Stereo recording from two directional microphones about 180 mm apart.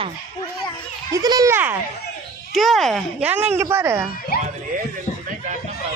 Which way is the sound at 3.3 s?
10° right (ahead or behind).